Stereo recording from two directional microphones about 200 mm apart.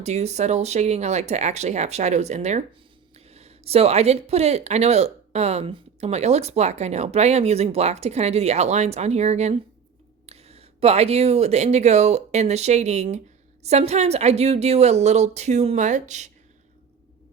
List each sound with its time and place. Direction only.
0.0 s speech: 35° right (ahead or behind)